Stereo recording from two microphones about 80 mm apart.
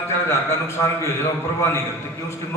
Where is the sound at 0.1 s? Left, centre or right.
Left.